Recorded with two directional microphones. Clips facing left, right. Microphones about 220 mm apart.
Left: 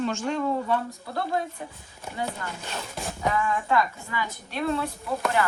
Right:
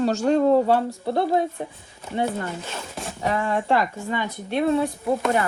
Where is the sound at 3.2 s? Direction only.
30° right (ahead or behind).